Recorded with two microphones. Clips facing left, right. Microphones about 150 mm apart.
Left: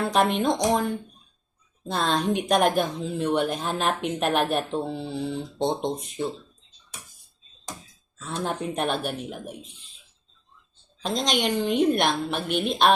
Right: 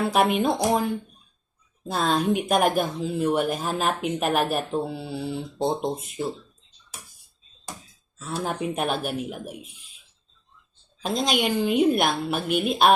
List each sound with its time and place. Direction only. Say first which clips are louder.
0.0 s speech: right 1 dB; 5° right (ahead or behind)
8.2 s speech: right 1 dB; 5° right (ahead or behind)
11.0 s speech: right 1 dB; 5° right (ahead or behind)